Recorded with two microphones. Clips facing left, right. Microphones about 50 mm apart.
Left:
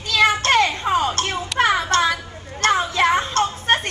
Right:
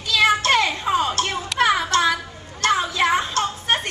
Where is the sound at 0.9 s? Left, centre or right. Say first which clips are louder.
Left 1 dB; left.